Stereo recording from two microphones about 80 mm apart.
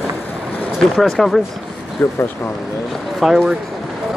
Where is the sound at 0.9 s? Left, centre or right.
Centre.